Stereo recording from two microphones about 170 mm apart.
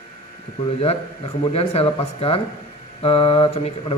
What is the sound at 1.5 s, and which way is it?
Speech, 35° left (ahead or behind).